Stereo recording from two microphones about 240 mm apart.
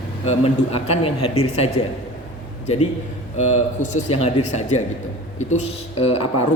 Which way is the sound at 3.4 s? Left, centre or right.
Left.